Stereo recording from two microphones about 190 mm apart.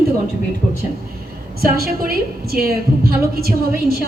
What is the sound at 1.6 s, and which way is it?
A woman's voice, 50° right (ahead or behind).